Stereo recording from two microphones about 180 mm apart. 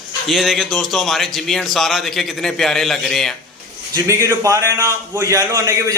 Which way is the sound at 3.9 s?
15° right (ahead or behind).